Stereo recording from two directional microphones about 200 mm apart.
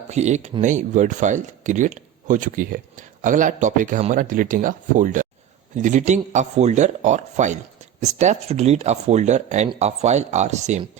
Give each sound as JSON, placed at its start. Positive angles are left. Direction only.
{"t": 0.1, "sound": "speech", "side_deg": -35}